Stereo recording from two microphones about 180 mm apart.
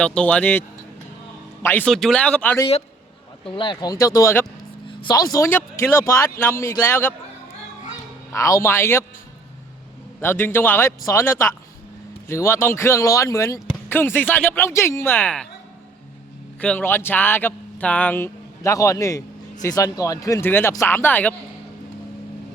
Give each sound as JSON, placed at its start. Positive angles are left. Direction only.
{"t": 0.0, "sound": "speech", "side_deg": 5}
{"t": 1.6, "sound": "speech", "side_deg": 10}
{"t": 3.4, "sound": "speech", "side_deg": 25}
{"t": 4.9, "sound": "speech", "side_deg": 25}
{"t": 8.3, "sound": "speech", "side_deg": 15}
{"t": 10.2, "sound": "speech", "side_deg": 10}
{"t": 16.6, "sound": "speech", "side_deg": 10}